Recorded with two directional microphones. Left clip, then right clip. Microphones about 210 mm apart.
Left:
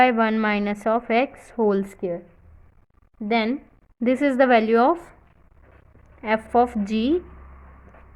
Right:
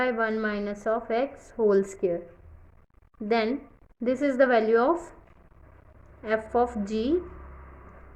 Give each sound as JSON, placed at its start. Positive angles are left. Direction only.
{"t": 0.0, "sound": "a woman's voice", "side_deg": 35}
{"t": 1.6, "sound": "a woman's voice", "side_deg": 25}
{"t": 3.2, "sound": "a woman's voice", "side_deg": 25}
{"t": 6.2, "sound": "a woman's voice", "side_deg": 30}